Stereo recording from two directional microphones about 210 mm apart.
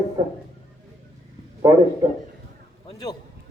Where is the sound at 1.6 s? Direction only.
20° right (ahead or behind).